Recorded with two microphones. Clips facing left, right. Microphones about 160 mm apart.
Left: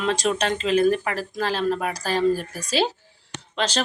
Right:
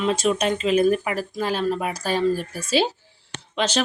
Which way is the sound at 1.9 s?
40° left (ahead or behind).